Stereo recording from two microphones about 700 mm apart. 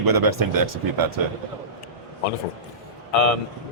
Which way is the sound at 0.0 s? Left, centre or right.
Right.